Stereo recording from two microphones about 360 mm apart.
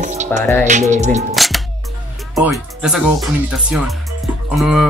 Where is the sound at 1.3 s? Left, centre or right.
Centre.